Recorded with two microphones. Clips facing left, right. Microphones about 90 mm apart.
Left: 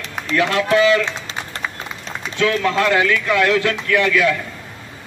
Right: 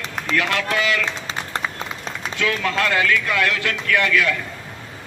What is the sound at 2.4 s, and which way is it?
A man's voice, 25° left (ahead or behind).